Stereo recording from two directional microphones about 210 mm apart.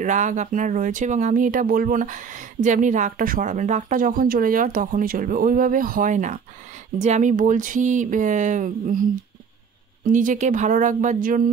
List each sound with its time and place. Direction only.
0.0 s speech: 35° right (ahead or behind)
10.0 s speech: 40° right (ahead or behind)